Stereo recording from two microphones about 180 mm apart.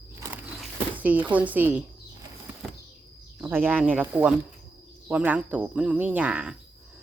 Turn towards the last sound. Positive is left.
turn(degrees=-5)  # may be behind; listen again after turning